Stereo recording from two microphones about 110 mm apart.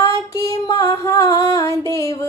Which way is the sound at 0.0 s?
30° left (ahead or behind).